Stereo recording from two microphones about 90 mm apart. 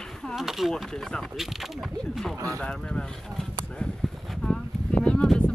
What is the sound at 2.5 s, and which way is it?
Speech, 10° left (ahead or behind).